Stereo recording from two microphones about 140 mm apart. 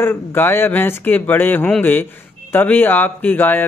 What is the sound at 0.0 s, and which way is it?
Speech, 15° left (ahead or behind).